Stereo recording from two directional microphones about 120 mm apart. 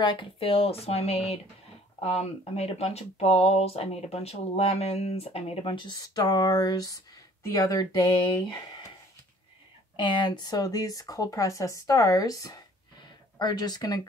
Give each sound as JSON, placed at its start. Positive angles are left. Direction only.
{"t": 0.0, "sound": "speech", "side_deg": 40}
{"t": 9.9, "sound": "speech", "side_deg": 45}